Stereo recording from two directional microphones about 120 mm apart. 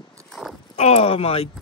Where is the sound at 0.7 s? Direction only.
60° left (ahead or behind).